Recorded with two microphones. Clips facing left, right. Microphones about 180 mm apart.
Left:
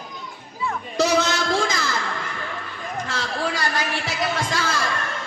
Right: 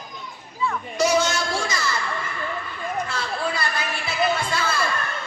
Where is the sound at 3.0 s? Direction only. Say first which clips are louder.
Left 1 dB; 90° left.